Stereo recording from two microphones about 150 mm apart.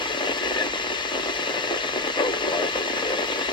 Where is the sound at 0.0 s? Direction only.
30° left (ahead or behind).